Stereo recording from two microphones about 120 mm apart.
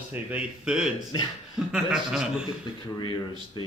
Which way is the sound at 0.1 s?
10° right (ahead or behind).